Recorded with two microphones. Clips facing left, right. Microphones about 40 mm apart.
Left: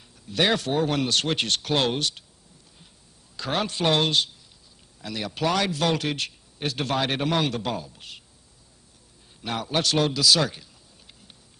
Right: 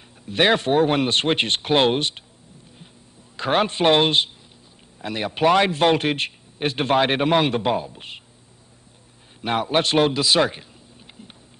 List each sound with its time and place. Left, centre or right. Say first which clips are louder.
0.3 s a man's voice: right 5 dB; right
3.3 s a man's voice: right 7 dB; right
9.4 s a man's voice: right 6 dB; right